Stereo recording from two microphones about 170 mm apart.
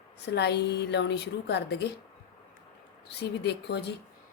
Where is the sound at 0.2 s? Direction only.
85° left.